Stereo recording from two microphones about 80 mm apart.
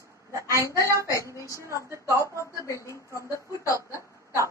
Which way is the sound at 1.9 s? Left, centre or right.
Right.